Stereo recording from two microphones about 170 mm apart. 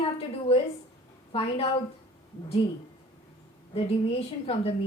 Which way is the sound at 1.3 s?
35° left (ahead or behind).